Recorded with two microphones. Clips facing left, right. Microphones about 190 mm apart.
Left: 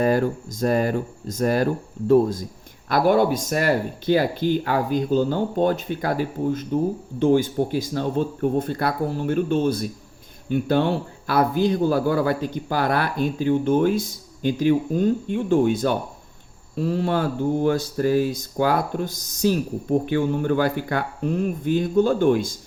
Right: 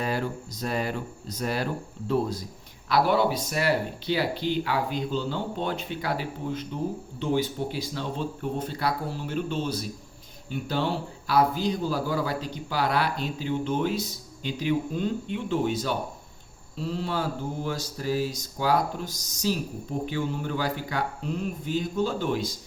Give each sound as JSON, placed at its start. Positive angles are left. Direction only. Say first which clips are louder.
{"t": 0.0, "sound": "speech", "louder": "left 9 dB", "side_deg": 45}